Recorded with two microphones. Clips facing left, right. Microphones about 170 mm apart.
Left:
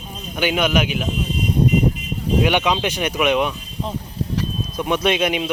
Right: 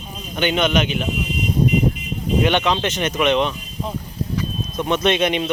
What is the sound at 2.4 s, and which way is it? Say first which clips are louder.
Speech: even; 10° left (ahead or behind).